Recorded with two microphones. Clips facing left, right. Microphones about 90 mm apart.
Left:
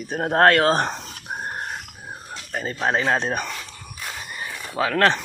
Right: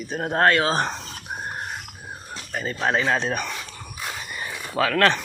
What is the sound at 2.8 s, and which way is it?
Speech, 30° left (ahead or behind).